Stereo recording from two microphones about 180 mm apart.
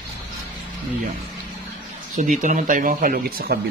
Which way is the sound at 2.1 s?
45° right (ahead or behind).